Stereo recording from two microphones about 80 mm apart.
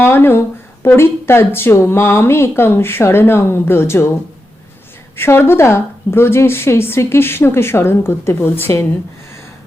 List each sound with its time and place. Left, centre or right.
0.0 s speech: left
5.1 s speech: left